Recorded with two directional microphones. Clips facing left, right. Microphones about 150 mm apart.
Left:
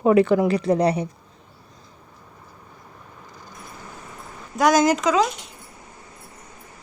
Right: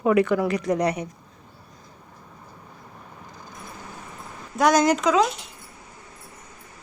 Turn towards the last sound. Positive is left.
turn(degrees=0)  # may be behind; listen again after turning